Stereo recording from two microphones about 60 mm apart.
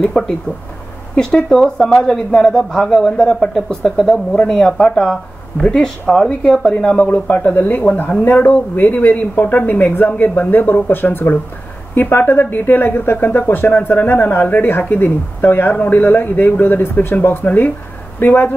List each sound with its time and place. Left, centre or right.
0.2 s speech: centre
7.2 s speech: left